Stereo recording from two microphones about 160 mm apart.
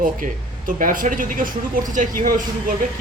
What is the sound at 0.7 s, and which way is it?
A man's voice, 60° right (ahead or behind).